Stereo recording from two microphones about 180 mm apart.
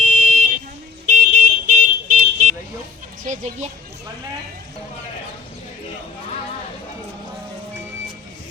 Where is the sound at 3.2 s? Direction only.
40° right (ahead or behind).